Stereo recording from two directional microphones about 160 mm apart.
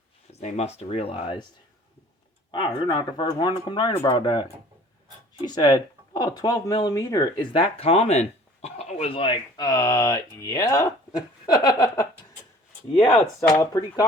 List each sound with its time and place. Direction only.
0.3 s speech: 40° left (ahead or behind)
2.5 s speech: 30° left (ahead or behind)
5.5 s speech: 25° left (ahead or behind)
7.5 s speech: 40° left (ahead or behind); by 10.9 s 20° left (ahead or behind)
11.4 s a sound: 25° left (ahead or behind)
13.5 s speech: 20° left (ahead or behind)